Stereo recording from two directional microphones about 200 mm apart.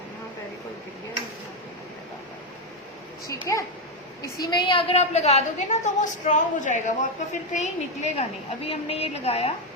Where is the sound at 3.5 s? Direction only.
15° left (ahead or behind).